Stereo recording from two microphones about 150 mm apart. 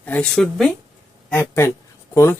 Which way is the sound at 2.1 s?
15° left (ahead or behind).